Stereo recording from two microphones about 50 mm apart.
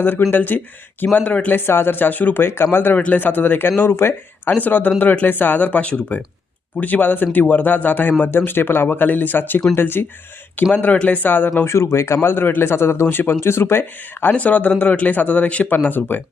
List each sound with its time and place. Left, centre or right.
0.3 s speech: left
1.1 s speech: left
1.5 s speech: left
2.7 s speech: left
4.4 s speech: left
8.3 s speech: left
10.6 s speech: left
11.6 s speech: left
14.3 s speech: left
15.7 s speech: left